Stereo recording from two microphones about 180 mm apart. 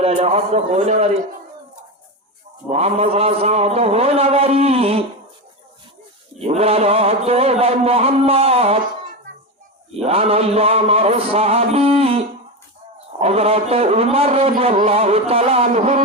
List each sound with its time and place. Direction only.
0.0 s a man's voice: 35° right (ahead or behind)
2.6 s a man's voice: 35° right (ahead or behind)
6.4 s a man's voice: 35° right (ahead or behind)
9.9 s a man's voice: 35° right (ahead or behind)